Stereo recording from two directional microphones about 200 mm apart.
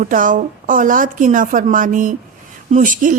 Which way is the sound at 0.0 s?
40° right (ahead or behind).